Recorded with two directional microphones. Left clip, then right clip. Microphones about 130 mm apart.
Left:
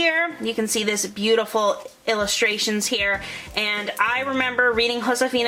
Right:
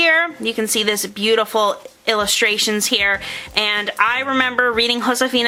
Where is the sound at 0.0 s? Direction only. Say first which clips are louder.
Right 5 dB; 50° right (ahead or behind).